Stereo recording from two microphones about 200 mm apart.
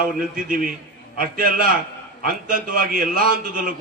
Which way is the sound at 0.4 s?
45° right (ahead or behind).